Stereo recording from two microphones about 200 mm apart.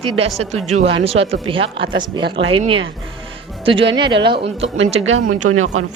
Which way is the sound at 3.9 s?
25° right (ahead or behind).